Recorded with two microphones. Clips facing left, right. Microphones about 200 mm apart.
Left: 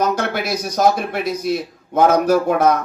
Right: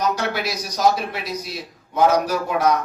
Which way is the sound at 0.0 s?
50° left (ahead or behind).